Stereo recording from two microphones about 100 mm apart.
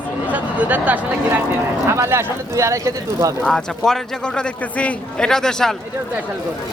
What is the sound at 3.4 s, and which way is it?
A man's voice, 5° left (ahead or behind).